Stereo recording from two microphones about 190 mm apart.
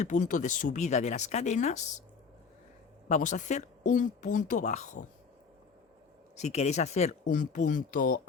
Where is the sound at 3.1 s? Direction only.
40° left (ahead or behind).